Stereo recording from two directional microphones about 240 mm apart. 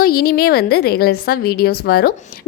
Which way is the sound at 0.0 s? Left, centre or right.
Left.